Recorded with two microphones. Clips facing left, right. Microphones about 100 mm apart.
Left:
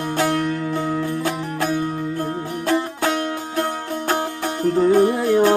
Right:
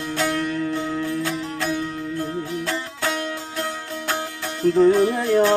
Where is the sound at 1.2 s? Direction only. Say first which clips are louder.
Left 3 dB; 50° left (ahead or behind).